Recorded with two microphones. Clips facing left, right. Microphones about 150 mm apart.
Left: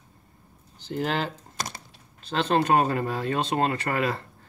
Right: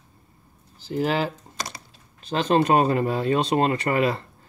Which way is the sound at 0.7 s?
5° right (ahead or behind).